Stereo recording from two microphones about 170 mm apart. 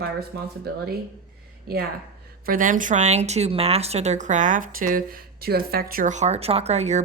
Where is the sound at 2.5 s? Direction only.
50° right (ahead or behind).